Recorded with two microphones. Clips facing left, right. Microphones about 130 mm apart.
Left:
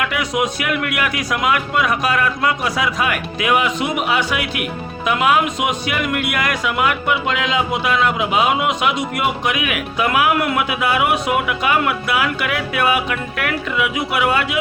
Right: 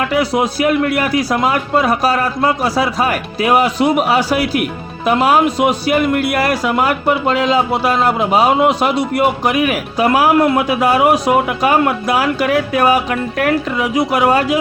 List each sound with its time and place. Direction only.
0.0 s speech: 35° right (ahead or behind)